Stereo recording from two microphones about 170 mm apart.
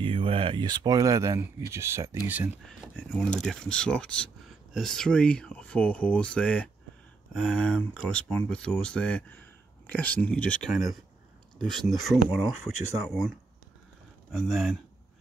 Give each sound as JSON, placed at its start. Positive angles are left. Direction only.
{"t": 0.0, "sound": "speech", "side_deg": -30}
{"t": 2.6, "sound": "speech", "side_deg": 5}
{"t": 14.3, "sound": "speech", "side_deg": 0}